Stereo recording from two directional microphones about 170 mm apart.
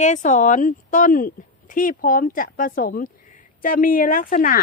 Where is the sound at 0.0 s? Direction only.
45° left (ahead or behind).